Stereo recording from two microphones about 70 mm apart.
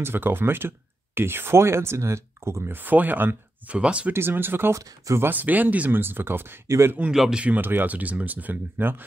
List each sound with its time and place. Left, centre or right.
0.0 s speech: right
2.7 s speech: right
4.1 s speech: right
4.7 s speech: right
5.2 s speech: right
7.1 s speech: centre
7.5 s speech: right